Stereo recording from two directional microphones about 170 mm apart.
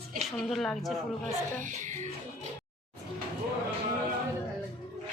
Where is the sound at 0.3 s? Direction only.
Centre (ahead or behind).